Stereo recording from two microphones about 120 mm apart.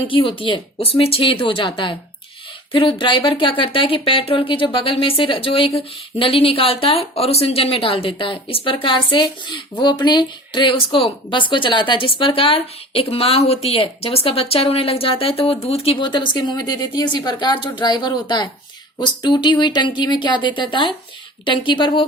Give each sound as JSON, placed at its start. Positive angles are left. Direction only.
{"t": 0.1, "sound": "speech", "side_deg": 45}